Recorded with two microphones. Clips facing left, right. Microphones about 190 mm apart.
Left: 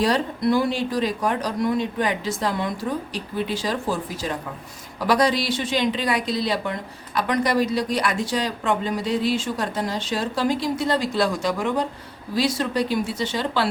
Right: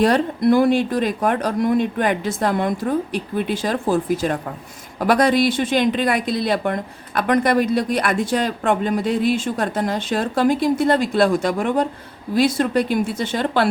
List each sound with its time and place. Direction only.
0.0 s speech: 55° right (ahead or behind)